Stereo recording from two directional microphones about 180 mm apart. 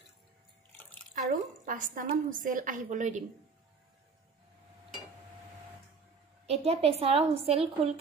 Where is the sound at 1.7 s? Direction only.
50° right (ahead or behind).